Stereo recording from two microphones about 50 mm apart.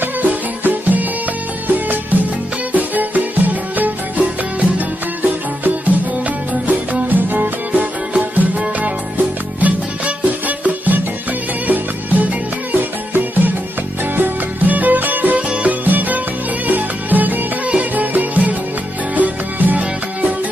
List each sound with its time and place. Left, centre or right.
0.0 s music: right
6.7 s music: right